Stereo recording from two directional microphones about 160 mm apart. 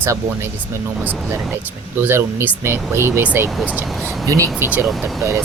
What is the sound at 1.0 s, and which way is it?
Speech, 10° right (ahead or behind).